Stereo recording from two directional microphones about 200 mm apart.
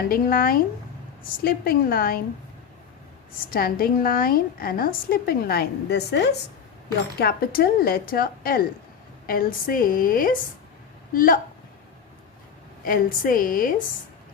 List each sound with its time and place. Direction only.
0.1 s a woman's voice: 50° left (ahead or behind)
3.5 s a woman's voice: 50° left (ahead or behind)
12.8 s a woman's voice: 45° left (ahead or behind)